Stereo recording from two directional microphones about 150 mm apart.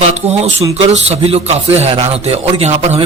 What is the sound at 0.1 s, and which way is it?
A man's voice, 45° right (ahead or behind).